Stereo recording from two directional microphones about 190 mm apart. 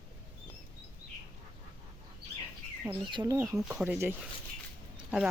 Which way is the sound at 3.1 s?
20° right (ahead or behind).